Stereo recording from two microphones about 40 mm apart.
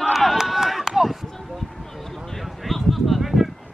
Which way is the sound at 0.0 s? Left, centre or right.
Centre.